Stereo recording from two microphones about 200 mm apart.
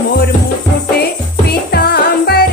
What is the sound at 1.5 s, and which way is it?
Music, 50° left (ahead or behind).